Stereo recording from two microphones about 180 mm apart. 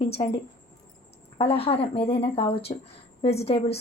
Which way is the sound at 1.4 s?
35° left (ahead or behind).